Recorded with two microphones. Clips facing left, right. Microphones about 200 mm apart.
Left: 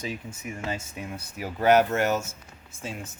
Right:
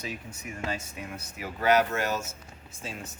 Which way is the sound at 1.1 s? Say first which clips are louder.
Left 5 dB; 40° left (ahead or behind).